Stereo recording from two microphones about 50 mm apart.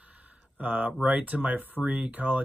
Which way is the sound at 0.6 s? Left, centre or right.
Right.